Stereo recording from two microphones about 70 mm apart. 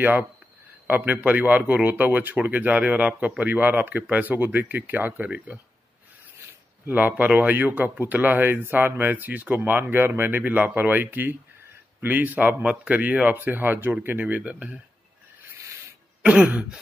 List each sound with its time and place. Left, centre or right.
0.0 s speech: right
6.9 s speech: right
16.2 s speech: centre